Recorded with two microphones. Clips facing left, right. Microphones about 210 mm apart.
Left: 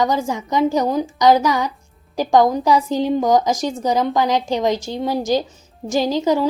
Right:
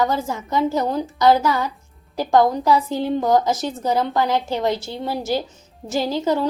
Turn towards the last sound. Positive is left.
turn(degrees=15)  # may be behind; listen again after turning